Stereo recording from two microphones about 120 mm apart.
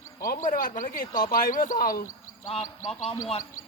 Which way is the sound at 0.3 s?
90° left.